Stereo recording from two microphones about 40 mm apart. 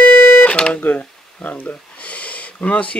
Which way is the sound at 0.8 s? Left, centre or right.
Left.